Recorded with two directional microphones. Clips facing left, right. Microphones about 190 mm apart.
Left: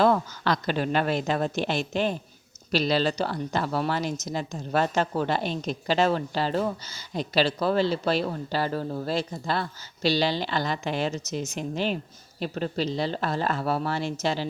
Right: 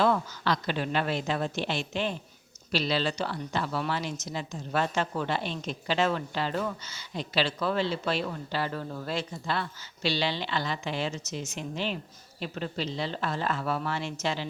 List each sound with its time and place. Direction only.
0.0 s a woman's voice: 45° left (ahead or behind)